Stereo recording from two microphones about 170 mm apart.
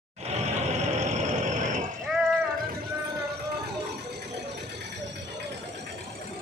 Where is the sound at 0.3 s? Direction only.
40° right (ahead or behind).